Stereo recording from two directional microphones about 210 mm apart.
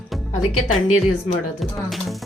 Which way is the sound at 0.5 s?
90° left.